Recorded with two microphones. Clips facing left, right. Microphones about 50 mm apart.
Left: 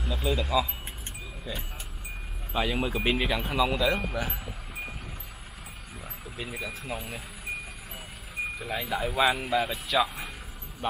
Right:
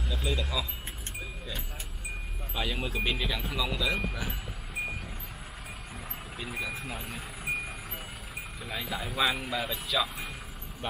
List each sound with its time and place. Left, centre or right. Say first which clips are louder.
0.0 s speech: left 4 dB; centre
2.5 s speech: left 5 dB; centre
3.0 s speech: left 3 dB; left
3.9 s speech: left 3 dB; centre
6.3 s speech: even; centre
8.6 s speech: left 4 dB; centre